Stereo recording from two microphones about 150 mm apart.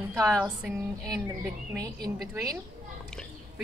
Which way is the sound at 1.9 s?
90° right.